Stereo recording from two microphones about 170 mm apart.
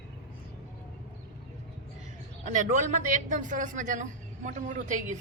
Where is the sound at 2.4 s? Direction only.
45° right (ahead or behind).